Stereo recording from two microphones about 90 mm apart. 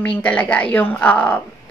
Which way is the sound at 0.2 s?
15° left (ahead or behind).